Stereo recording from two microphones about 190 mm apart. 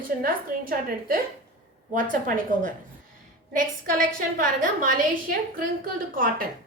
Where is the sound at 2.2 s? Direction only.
45° right (ahead or behind).